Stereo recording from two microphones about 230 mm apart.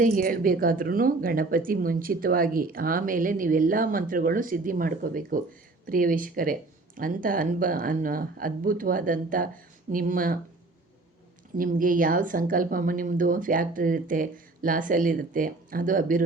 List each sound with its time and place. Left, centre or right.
0.0 s speech: right
11.5 s speech: right